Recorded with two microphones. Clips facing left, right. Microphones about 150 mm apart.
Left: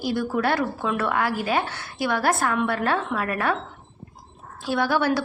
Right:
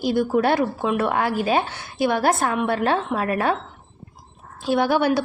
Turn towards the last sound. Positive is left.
turn(degrees=-20)  # may be behind; listen again after turning